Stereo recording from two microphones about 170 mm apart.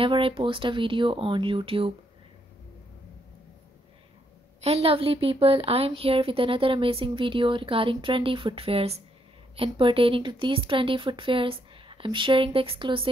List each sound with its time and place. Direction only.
0.0 s speech: 30° right (ahead or behind)
4.6 s speech: 40° right (ahead or behind)